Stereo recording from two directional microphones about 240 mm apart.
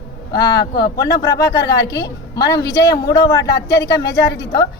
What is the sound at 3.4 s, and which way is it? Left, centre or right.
Speech, left.